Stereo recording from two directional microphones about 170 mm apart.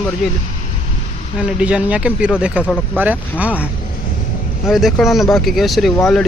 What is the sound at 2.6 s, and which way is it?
Speech, 10° left (ahead or behind).